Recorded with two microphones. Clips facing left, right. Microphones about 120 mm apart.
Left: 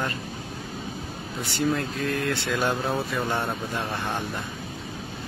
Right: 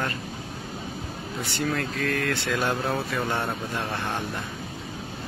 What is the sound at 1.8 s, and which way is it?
Speech, 25° left (ahead or behind).